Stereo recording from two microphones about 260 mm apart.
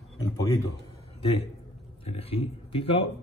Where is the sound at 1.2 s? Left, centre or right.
Left.